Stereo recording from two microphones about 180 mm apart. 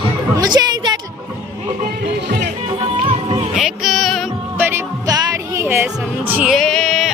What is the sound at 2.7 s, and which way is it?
Music, 30° right (ahead or behind).